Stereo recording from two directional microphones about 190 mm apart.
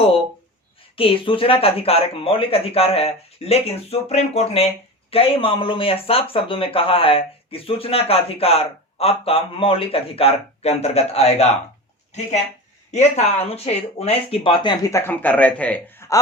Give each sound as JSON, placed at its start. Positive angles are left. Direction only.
{"t": 0.9, "sound": "speech", "side_deg": 30}
{"t": 12.9, "sound": "speech", "side_deg": 35}